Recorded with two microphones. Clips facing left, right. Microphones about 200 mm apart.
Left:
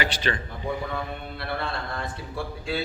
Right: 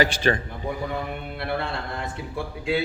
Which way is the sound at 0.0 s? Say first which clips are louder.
Right 6 dB; 45° right (ahead or behind).